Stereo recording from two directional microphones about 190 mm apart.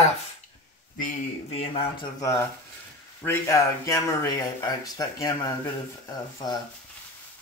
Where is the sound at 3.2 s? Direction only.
15° left (ahead or behind).